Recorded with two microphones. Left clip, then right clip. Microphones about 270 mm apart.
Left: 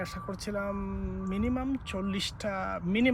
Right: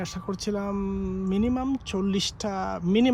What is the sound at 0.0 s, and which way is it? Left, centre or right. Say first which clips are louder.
Speech: right 5 dB; right.